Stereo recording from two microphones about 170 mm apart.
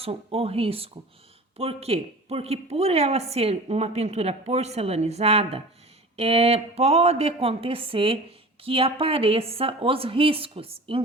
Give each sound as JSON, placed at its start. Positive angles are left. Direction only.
{"t": 0.0, "sound": "a woman's voice", "side_deg": -35}